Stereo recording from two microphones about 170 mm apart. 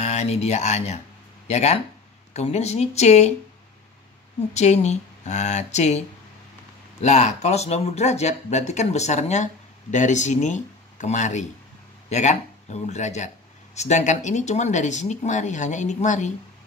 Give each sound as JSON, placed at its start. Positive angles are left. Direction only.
{"t": 0.0, "sound": "speech", "side_deg": 40}
{"t": 4.6, "sound": "speech", "side_deg": 40}